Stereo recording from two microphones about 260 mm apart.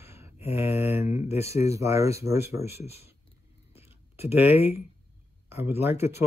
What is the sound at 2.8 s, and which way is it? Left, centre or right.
Speech, left.